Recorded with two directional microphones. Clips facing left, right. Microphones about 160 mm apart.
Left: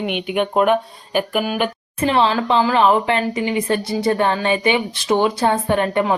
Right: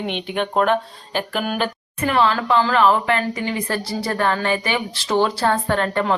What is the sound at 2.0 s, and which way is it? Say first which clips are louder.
Speech: left 2 dB; 25° left (ahead or behind).